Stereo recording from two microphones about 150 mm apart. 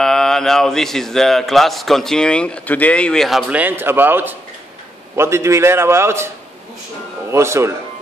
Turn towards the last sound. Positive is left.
turn(degrees=-20)  # may be behind; listen again after turning